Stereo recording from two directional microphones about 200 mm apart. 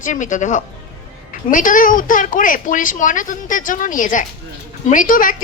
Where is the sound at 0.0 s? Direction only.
40° left (ahead or behind).